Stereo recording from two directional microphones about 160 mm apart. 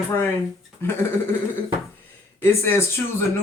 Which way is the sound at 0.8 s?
15° left (ahead or behind).